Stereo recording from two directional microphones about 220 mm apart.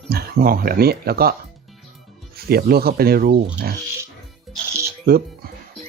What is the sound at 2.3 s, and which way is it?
Speech, 45° right (ahead or behind).